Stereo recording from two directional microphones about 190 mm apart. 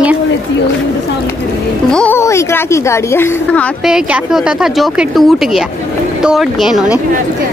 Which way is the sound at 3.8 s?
5° right (ahead or behind).